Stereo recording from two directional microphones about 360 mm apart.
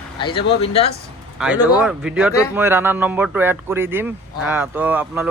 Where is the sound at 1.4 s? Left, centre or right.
Centre.